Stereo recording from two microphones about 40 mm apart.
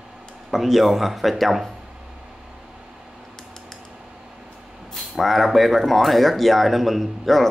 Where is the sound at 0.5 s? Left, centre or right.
Centre.